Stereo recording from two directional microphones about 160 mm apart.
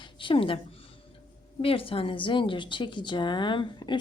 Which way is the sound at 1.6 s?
35° left (ahead or behind).